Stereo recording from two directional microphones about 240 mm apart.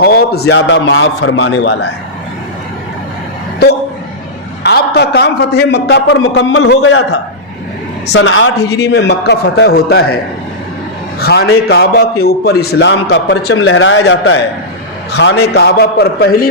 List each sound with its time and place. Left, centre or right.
0.0 s a man's voice: left
4.6 s a man's voice: left
11.2 s a man's voice: left